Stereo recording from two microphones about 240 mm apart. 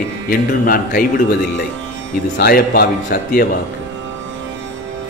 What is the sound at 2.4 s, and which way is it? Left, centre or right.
Speech, left.